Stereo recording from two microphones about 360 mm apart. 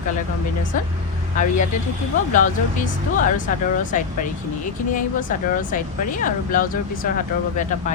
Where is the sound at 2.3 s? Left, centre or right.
Left.